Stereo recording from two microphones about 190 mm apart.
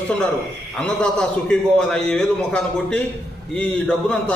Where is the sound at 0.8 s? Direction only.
5° left (ahead or behind).